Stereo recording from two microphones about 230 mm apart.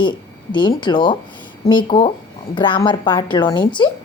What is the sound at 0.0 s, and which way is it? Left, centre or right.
A woman's voice, centre.